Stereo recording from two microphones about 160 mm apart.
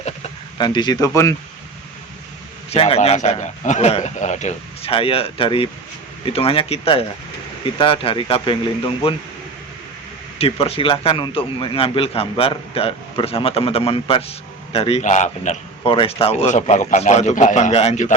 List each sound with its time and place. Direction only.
0.6 s speech: 30° left (ahead or behind)
2.6 s a man's voice: 40° left (ahead or behind)
10.3 s a man's voice: 40° left (ahead or behind)
15.8 s a man's voice: 35° left (ahead or behind)